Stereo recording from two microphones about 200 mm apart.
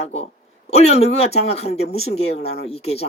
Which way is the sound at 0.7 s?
30° left (ahead or behind).